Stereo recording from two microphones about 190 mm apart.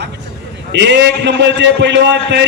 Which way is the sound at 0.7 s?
65° right (ahead or behind).